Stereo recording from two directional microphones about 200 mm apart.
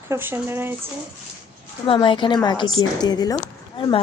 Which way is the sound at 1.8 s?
25° left (ahead or behind).